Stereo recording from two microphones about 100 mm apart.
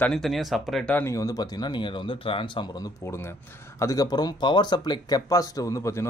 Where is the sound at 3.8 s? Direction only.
40° left (ahead or behind).